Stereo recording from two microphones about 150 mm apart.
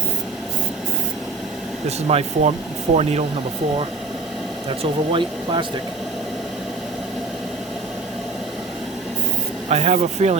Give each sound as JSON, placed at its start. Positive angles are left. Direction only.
{"t": 2.0, "sound": "speech", "side_deg": -40}
{"t": 4.8, "sound": "speech", "side_deg": -35}
{"t": 9.6, "sound": "speech", "side_deg": -45}